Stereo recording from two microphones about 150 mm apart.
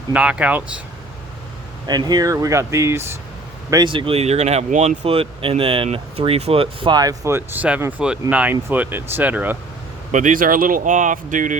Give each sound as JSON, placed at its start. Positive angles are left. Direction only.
{"t": 0.1, "sound": "speech", "side_deg": -10}
{"t": 1.9, "sound": "speech", "side_deg": -25}
{"t": 3.7, "sound": "speech", "side_deg": -30}
{"t": 5.0, "sound": "speech", "side_deg": -40}
{"t": 10.1, "sound": "speech", "side_deg": -55}